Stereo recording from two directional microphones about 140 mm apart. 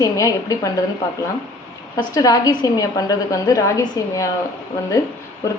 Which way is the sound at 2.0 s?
25° left (ahead or behind).